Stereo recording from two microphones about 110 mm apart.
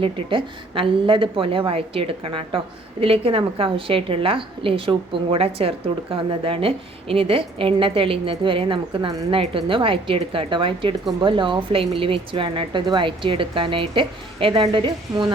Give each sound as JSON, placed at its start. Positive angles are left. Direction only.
{"t": 0.0, "sound": "a woman's voice", "side_deg": -50}